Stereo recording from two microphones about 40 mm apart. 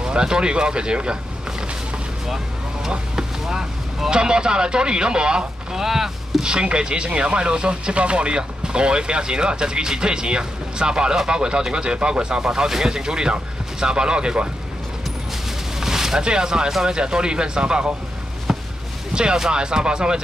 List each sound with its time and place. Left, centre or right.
0.0 s speech: centre
2.2 s vehicle: centre
2.9 s speech: centre
5.8 s speech: centre
15.8 s speech: centre
18.5 s a sound: centre
19.1 s speech: right